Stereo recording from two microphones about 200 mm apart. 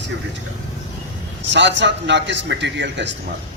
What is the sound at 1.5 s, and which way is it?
A man's voice, 60° right (ahead or behind).